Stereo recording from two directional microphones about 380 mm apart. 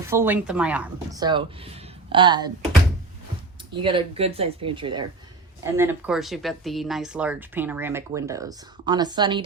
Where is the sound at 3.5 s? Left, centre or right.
Centre.